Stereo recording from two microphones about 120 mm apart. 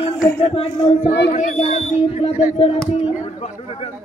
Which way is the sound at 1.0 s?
80° left.